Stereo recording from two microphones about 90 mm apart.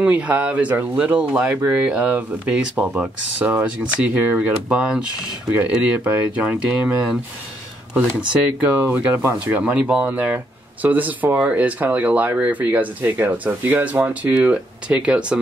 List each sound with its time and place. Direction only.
0.0 s speech: 15° right (ahead or behind)
8.3 s speech: 20° right (ahead or behind)